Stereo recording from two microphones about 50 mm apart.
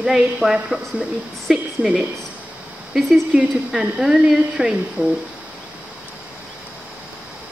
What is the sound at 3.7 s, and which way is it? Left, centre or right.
A woman's voice, centre.